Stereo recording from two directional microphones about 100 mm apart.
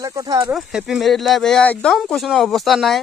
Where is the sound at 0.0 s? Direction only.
35° right (ahead or behind).